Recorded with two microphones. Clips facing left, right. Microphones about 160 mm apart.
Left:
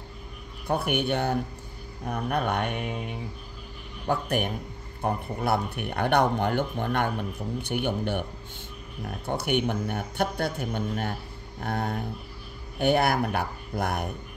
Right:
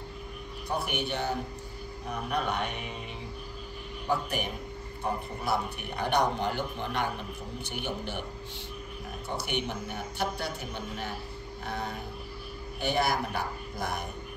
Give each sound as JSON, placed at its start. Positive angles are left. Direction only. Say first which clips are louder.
{"t": 0.7, "sound": "speech", "louder": "left 6 dB", "side_deg": 55}